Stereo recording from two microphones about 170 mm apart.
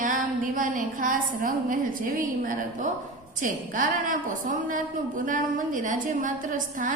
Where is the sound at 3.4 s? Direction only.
50° right (ahead or behind).